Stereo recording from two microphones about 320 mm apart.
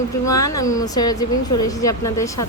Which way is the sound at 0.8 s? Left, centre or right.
Centre.